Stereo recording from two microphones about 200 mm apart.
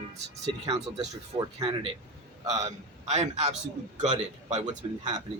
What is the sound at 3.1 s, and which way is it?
A man's voice, 30° right (ahead or behind).